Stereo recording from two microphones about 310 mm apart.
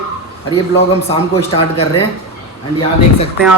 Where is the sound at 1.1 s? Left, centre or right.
Centre.